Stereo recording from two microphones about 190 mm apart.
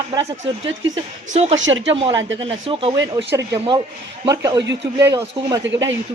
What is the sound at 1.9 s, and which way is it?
Speech, 30° right (ahead or behind).